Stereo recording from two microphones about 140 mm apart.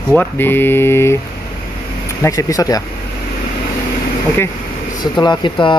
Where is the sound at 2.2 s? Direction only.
25° left (ahead or behind).